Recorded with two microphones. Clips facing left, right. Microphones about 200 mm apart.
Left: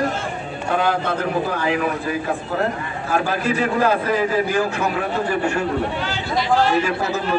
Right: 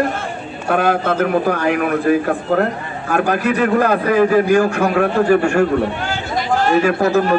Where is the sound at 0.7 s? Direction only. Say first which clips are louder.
Right 5 dB; 60° right (ahead or behind).